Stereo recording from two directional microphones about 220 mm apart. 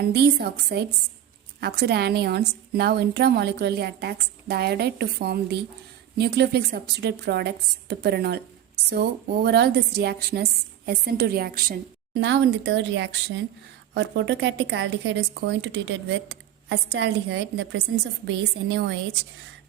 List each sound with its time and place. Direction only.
0.1 s speech: 50° right (ahead or behind)
12.2 s speech: 55° right (ahead or behind)